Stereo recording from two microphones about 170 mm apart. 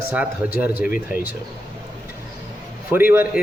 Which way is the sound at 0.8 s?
55° left (ahead or behind).